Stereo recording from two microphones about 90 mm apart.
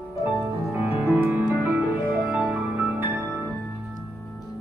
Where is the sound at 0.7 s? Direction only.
20° right (ahead or behind).